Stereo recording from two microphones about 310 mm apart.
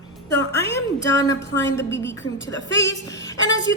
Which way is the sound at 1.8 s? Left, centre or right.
Centre.